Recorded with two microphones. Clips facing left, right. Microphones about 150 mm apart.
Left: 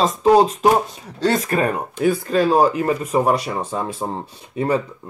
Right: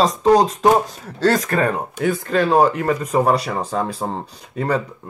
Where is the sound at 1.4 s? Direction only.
25° left (ahead or behind).